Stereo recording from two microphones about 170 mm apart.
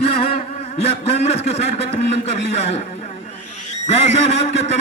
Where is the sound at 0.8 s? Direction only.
40° left (ahead or behind).